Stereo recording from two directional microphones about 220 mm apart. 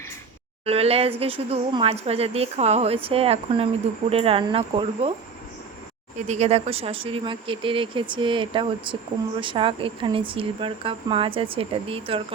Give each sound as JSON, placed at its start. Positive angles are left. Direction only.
{"t": 0.6, "sound": "speech", "side_deg": -25}
{"t": 6.1, "sound": "speech", "side_deg": -30}